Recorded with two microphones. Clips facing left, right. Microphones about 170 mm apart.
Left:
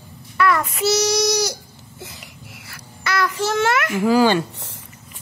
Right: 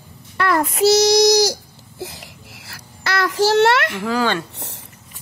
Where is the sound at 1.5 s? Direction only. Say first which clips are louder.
Right 3 dB; 35° right (ahead or behind).